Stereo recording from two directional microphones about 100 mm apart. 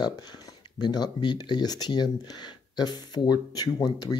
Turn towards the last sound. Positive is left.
turn(degrees=45)  # may be behind; listen again after turning